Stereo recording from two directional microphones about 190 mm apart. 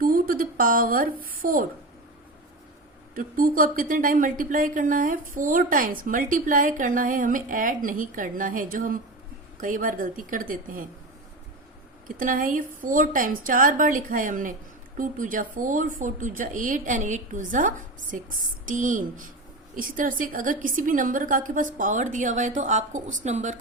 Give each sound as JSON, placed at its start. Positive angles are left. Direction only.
{"t": 0.0, "sound": "a sound", "side_deg": -50}
{"t": 3.2, "sound": "speech", "side_deg": -50}
{"t": 12.0, "sound": "speech", "side_deg": -45}